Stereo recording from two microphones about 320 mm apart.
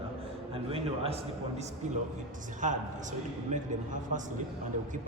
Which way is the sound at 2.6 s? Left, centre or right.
Right.